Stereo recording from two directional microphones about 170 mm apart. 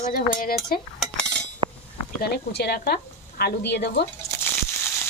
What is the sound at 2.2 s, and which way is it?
Speech, 75° left (ahead or behind).